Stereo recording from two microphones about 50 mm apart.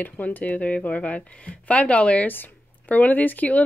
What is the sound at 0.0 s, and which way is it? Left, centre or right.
Speech, left.